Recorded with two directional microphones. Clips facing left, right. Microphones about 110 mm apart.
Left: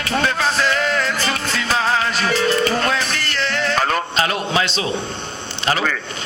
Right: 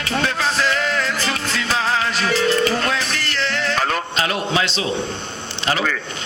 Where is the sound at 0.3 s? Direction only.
45° left (ahead or behind).